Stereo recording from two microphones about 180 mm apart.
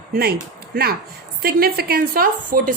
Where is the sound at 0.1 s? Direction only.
60° right (ahead or behind).